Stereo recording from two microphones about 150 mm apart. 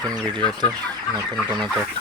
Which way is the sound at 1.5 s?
30° right (ahead or behind).